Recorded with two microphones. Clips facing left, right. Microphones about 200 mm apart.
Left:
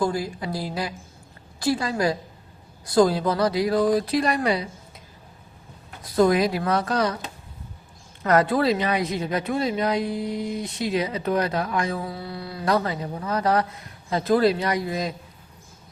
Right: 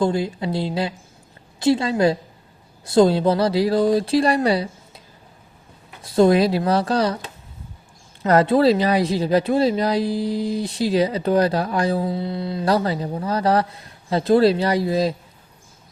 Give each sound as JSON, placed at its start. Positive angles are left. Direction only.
{"t": 0.0, "sound": "speech", "side_deg": -25}
{"t": 6.0, "sound": "speech", "side_deg": -25}
{"t": 8.2, "sound": "speech", "side_deg": -25}